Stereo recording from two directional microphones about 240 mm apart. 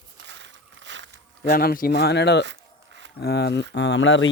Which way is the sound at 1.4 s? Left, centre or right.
Left.